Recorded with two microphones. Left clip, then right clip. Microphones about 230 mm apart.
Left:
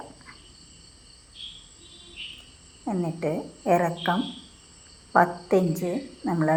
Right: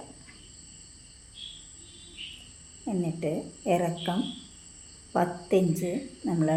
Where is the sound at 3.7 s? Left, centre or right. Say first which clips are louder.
Left 5 dB; centre.